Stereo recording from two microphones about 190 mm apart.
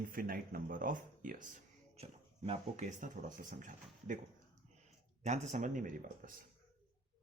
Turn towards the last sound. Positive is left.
turn(degrees=-45)  # may be behind; listen again after turning